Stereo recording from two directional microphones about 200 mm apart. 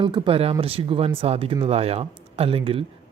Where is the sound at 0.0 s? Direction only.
25° right (ahead or behind).